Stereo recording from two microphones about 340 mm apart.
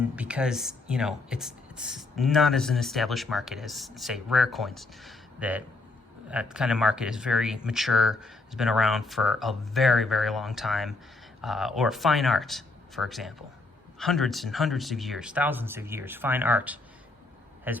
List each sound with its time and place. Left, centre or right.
0.2 s speech: centre